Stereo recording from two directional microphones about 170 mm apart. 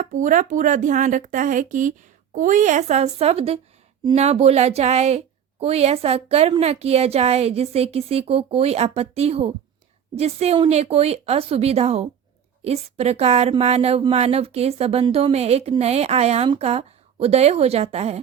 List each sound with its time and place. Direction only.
0.0 s a woman's voice: 50° right (ahead or behind)